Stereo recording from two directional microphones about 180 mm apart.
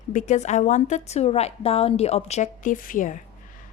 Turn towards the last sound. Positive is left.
turn(degrees=45)  # may be behind; listen again after turning